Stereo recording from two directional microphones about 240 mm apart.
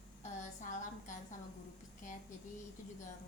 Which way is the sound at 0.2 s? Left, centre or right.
Left.